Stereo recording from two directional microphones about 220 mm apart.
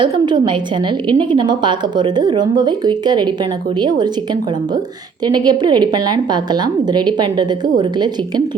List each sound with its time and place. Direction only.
0.0 s a woman's voice: 20° right (ahead or behind)
5.2 s a woman's voice: 20° right (ahead or behind)